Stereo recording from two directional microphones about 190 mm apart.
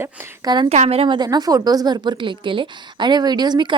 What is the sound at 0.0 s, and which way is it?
Speech, 20° right (ahead or behind).